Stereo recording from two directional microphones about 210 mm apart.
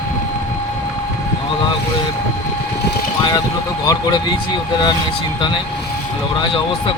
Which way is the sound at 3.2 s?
20° left (ahead or behind).